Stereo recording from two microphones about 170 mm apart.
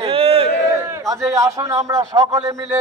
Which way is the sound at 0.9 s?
20° right (ahead or behind).